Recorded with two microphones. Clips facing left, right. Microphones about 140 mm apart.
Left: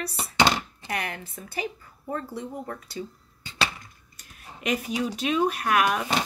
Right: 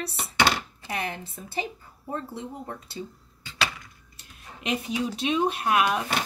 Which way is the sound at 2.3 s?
25° right (ahead or behind).